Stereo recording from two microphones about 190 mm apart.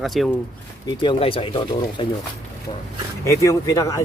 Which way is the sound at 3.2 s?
15° left (ahead or behind).